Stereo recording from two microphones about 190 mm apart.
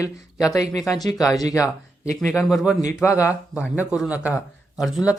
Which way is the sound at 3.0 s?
15° left (ahead or behind).